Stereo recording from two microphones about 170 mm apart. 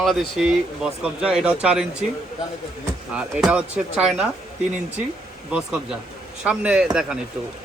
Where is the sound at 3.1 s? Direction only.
5° right (ahead or behind).